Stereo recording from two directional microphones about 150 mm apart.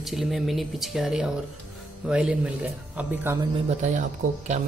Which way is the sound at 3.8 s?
55° right (ahead or behind).